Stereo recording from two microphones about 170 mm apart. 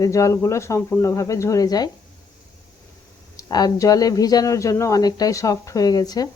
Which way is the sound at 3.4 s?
25° left (ahead or behind).